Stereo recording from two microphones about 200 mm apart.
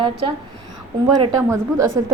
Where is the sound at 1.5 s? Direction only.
15° right (ahead or behind).